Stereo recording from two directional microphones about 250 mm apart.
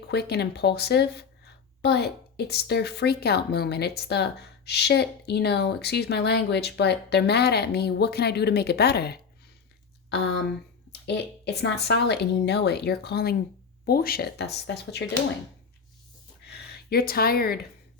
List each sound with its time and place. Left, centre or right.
0.1 s a woman's voice: left
11.0 s a woman's voice: left
16.5 s speech: left